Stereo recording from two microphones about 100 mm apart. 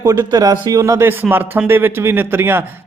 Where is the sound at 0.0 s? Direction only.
30° right (ahead or behind).